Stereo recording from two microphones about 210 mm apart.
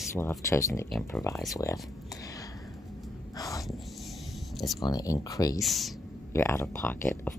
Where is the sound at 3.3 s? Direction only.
15° left (ahead or behind).